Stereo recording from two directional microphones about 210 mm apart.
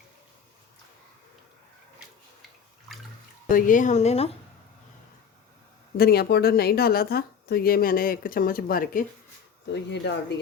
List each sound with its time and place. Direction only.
3.5 s speech: 40° left (ahead or behind)
6.0 s speech: 45° left (ahead or behind)
9.6 s speech: 55° left (ahead or behind)